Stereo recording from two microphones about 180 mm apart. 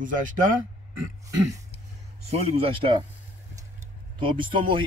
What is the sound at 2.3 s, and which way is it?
Speech, 30° right (ahead or behind).